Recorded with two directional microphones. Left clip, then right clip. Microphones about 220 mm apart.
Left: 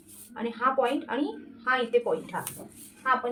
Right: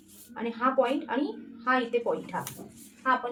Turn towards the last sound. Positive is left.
turn(degrees=-10)  # may be behind; listen again after turning